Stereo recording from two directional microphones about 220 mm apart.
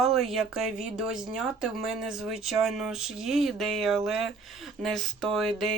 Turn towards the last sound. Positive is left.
turn(degrees=0)  # may be behind; listen again after turning